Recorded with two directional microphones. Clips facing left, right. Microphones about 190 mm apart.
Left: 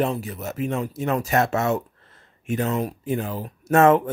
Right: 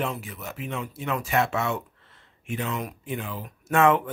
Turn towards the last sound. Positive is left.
turn(degrees=40)  # may be behind; listen again after turning